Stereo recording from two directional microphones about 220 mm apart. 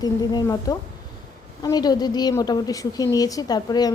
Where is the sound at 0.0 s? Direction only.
20° left (ahead or behind).